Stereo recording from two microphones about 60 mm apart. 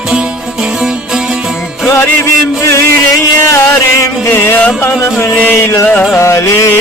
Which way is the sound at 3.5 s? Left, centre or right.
Left.